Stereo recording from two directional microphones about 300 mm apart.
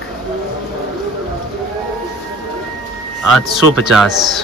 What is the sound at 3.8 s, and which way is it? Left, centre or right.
Speech, centre.